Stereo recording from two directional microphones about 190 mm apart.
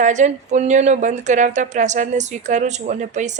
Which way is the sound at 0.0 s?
40° right (ahead or behind).